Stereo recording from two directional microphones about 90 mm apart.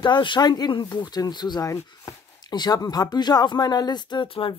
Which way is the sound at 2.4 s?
50° left (ahead or behind).